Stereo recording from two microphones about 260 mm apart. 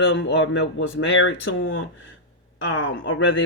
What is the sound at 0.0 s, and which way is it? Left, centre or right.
Speech, left.